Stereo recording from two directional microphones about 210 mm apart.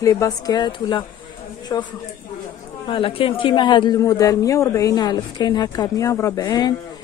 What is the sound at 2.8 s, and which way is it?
A man's voice, 25° left (ahead or behind).